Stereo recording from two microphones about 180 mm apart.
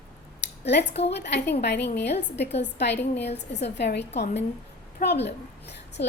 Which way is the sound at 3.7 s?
70° left (ahead or behind).